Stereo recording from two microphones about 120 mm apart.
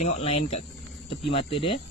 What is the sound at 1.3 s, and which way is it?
Speech, 50° left (ahead or behind).